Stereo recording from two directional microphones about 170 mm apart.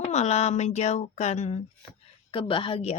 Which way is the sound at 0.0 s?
40° left (ahead or behind).